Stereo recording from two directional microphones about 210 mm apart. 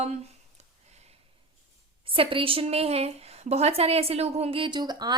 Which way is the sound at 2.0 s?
25° right (ahead or behind).